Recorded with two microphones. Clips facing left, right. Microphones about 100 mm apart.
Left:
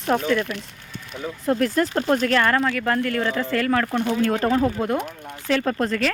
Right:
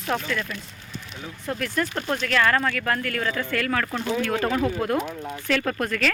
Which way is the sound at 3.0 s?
20° left (ahead or behind).